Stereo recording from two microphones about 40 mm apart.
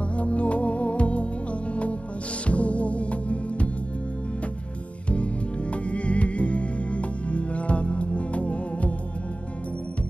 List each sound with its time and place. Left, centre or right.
0.2 s music: left
5.1 s music: left